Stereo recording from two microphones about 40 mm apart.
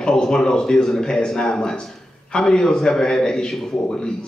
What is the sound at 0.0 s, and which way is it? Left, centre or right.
Speech, centre.